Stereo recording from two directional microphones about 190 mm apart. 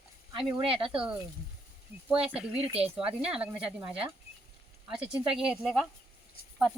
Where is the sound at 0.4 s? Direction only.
25° right (ahead or behind).